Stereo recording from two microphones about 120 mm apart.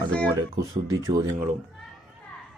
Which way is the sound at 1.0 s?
30° right (ahead or behind).